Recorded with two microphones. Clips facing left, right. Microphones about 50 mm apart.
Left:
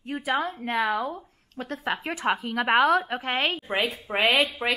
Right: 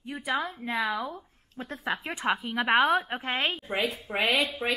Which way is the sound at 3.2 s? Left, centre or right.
Left.